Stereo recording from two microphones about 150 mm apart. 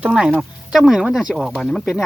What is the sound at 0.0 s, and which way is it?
Speech, 5° right (ahead or behind).